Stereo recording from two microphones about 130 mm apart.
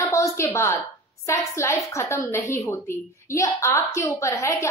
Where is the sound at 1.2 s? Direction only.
20° left (ahead or behind).